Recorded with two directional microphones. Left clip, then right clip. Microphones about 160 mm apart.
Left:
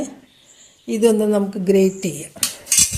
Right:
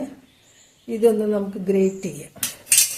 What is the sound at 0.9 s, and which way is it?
A woman's voice, 40° left (ahead or behind).